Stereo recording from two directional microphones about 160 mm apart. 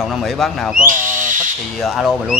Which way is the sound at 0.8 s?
55° right (ahead or behind).